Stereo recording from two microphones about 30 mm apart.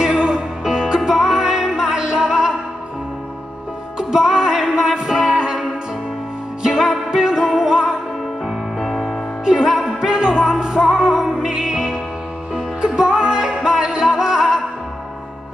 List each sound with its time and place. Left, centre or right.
0.1 s music: right
4.3 s music: right
6.6 s music: right
8.8 s music: centre
9.4 s music: centre
9.9 s music: right